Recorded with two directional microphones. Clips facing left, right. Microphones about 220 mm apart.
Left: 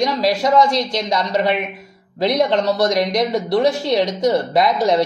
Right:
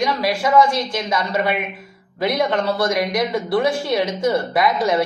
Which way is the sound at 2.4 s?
25° left (ahead or behind).